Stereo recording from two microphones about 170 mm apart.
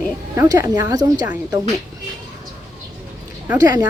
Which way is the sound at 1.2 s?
10° right (ahead or behind).